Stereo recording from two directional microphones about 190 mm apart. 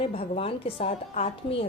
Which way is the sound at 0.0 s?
30° left (ahead or behind).